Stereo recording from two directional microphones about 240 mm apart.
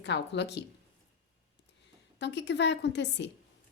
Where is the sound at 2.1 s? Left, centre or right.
Left.